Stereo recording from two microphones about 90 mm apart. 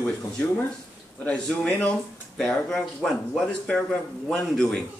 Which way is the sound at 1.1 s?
15° left (ahead or behind).